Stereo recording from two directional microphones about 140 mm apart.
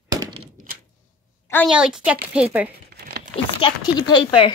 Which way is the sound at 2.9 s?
90° right.